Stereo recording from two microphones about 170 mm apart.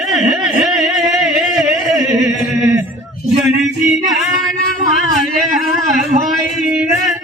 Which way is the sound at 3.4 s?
Centre (ahead or behind).